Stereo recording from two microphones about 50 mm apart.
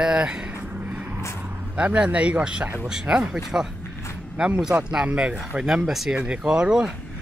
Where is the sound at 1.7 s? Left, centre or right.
Right.